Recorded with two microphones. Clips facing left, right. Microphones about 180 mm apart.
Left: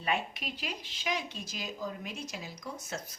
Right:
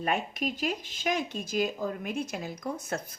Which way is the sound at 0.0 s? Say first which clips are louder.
Right 4 dB; 45° right (ahead or behind).